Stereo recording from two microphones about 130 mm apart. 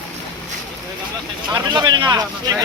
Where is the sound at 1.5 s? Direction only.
35° right (ahead or behind).